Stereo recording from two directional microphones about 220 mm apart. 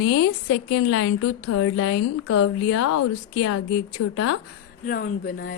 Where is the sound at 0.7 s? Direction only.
90° left.